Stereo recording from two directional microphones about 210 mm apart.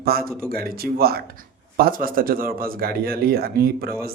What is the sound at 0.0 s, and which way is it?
A man's voice, 45° right (ahead or behind).